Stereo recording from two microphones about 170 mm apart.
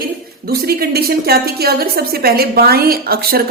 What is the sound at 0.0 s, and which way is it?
A woman's voice, 65° right (ahead or behind).